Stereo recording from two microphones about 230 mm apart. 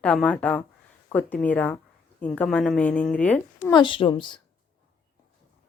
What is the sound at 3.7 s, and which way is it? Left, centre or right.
Speech, centre.